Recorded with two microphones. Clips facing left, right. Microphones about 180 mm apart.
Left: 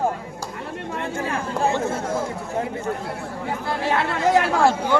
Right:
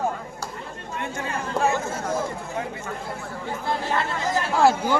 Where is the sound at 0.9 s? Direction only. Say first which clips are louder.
Left 2 dB; 30° left (ahead or behind).